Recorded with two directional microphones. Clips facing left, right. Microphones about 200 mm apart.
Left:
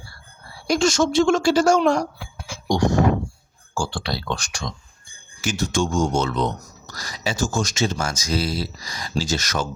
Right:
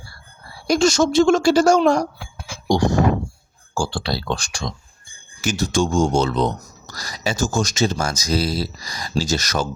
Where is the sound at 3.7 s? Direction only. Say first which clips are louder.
Right 3 dB; 35° right (ahead or behind).